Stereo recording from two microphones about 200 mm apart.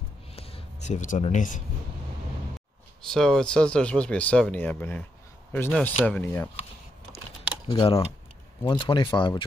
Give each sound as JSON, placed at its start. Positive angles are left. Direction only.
{"t": 0.4, "sound": "a sound", "side_deg": 30}
{"t": 0.8, "sound": "speech", "side_deg": 40}
{"t": 3.1, "sound": "speech", "side_deg": 5}
{"t": 7.6, "sound": "speech", "side_deg": 25}